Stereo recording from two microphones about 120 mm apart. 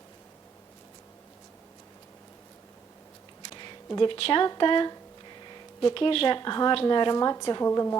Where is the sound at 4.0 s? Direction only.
50° left (ahead or behind); by 8.0 s 25° left (ahead or behind).